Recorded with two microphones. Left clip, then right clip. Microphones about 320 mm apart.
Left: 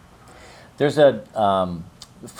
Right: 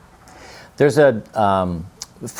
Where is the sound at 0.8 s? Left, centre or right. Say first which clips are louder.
Right 2 dB; right.